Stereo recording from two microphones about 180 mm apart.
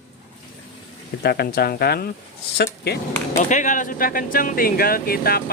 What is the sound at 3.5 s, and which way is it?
Speech, 45° left (ahead or behind).